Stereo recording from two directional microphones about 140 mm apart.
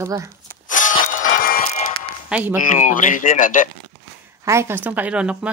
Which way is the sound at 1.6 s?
55° left (ahead or behind).